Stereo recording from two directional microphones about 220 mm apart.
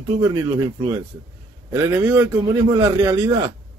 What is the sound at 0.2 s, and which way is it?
A man's voice, 15° right (ahead or behind).